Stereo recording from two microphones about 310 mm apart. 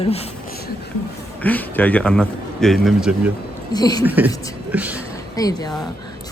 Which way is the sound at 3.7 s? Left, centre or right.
Centre.